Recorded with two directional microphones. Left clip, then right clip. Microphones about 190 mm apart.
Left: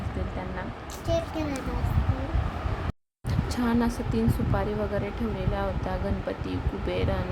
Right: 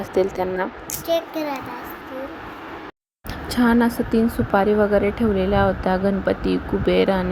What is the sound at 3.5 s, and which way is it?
A woman's voice, 20° right (ahead or behind).